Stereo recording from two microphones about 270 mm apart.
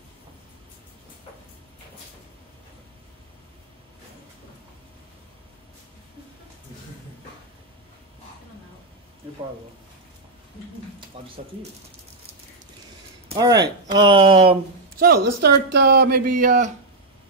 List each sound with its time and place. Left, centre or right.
11.1 s speech: centre
13.3 s speech: centre
15.0 s a woman's voice: right